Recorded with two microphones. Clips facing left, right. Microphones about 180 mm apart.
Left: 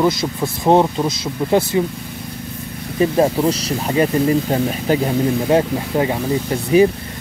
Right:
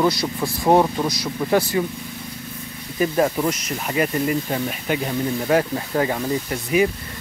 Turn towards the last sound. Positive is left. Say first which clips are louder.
# left 6 dB
turn(degrees=30)  # may be behind; listen again after turning